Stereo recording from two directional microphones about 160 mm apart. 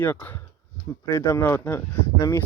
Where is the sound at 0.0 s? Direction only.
10° left (ahead or behind).